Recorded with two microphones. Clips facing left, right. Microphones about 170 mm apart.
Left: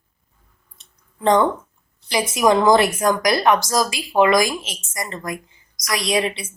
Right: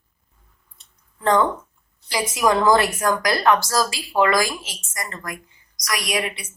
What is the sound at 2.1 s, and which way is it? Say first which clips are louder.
A woman's voice: left 3 dB; 20° left (ahead or behind).